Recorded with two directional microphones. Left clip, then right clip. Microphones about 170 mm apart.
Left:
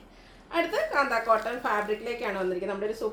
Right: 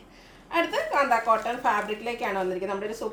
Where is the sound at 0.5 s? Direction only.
15° right (ahead or behind).